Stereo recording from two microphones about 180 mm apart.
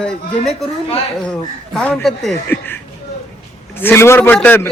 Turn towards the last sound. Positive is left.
turn(degrees=10)  # may be behind; listen again after turning